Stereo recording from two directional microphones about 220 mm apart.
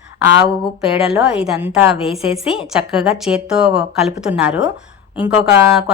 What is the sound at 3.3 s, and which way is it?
A woman's voice, 5° right (ahead or behind).